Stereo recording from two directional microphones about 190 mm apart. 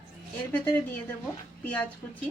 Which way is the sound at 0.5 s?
10° left (ahead or behind).